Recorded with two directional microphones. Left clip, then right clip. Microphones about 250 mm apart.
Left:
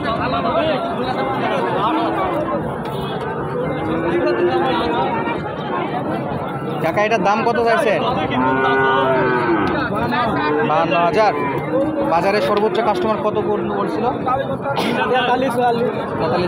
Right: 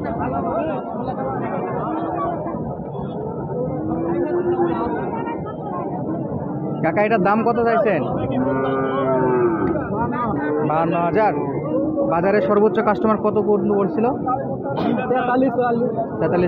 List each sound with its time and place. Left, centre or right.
6.8 s speech: centre
10.7 s speech: centre
12.7 s speech: right
15.3 s speech: right